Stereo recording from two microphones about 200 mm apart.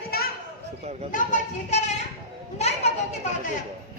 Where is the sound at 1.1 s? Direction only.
40° left (ahead or behind).